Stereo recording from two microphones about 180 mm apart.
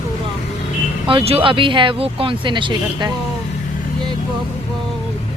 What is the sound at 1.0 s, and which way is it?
Speech, 30° right (ahead or behind).